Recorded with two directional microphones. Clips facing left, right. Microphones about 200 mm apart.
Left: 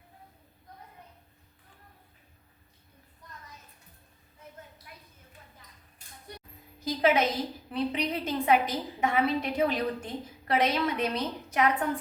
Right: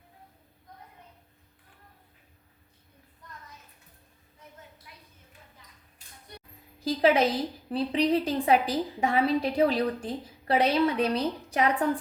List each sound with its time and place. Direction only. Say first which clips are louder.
6.8 s a woman's voice: right 3 dB; 35° right (ahead or behind)